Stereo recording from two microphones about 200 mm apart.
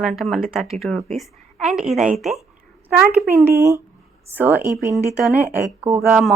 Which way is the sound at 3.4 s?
15° right (ahead or behind).